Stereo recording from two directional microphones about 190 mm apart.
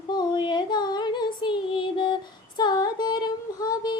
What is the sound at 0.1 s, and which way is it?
Female singing, 25° left (ahead or behind).